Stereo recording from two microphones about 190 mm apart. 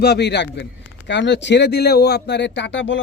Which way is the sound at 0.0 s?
60° left (ahead or behind).